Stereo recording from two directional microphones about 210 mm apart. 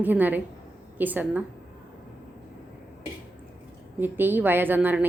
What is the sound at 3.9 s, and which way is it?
A woman's voice, 10° right (ahead or behind).